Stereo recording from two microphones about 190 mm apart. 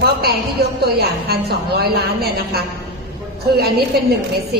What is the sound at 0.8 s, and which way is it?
A woman's voice, 55° right (ahead or behind).